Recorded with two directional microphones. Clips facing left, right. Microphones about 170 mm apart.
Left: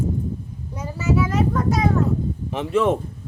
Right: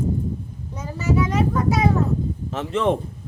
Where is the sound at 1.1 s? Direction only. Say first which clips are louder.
Even; 5° left (ahead or behind).